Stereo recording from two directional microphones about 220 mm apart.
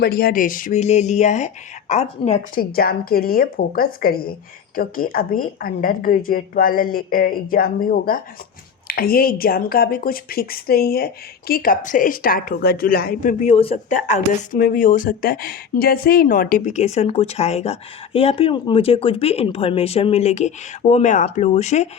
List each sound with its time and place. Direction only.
0.0 s speech: 45° left (ahead or behind)